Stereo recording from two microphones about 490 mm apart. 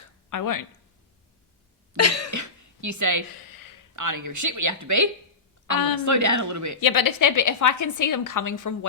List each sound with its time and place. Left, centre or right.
0.3 s a woman's voice: left
2.0 s a woman's voice: left
2.3 s a sound: right
3.3 s a sound: left
3.9 s speech: right
6.1 s speech: right
6.7 s a woman's voice: left